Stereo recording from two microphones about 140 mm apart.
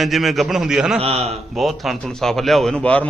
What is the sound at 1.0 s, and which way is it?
Speech, 45° right (ahead or behind).